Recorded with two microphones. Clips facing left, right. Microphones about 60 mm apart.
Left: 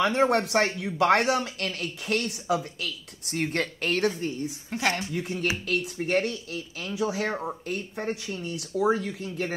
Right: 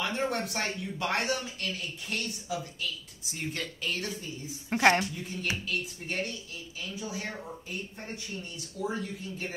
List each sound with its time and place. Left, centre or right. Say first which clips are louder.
0.0 s speech: left 8 dB; left
4.6 s a woman's voice: right 5 dB; right
5.1 s speech: left 6 dB; left